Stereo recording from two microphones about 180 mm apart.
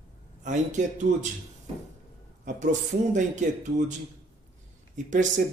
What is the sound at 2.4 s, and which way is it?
Speech, 45° right (ahead or behind).